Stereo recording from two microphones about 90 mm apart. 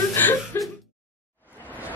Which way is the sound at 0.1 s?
20° left (ahead or behind).